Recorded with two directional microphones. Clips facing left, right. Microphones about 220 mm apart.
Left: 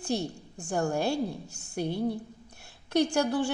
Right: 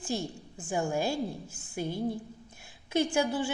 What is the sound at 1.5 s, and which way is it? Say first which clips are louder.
Speech: even; 40° left (ahead or behind).